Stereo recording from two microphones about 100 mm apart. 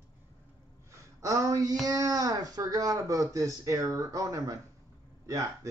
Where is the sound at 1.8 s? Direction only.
35° right (ahead or behind).